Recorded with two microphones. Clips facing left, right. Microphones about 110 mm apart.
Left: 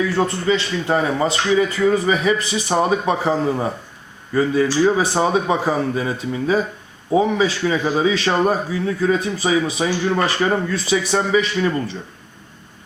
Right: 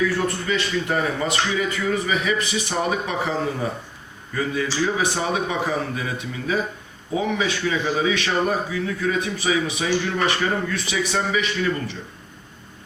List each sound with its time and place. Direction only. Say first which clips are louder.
0.2 s a man's voice: left 5 dB; 30° left (ahead or behind)
4.4 s a man's voice: left 7 dB; 30° left (ahead or behind)